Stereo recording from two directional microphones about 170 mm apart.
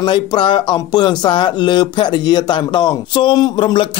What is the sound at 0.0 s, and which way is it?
Speech, 25° left (ahead or behind).